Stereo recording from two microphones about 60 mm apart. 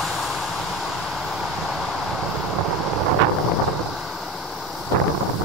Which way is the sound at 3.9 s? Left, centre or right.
Centre.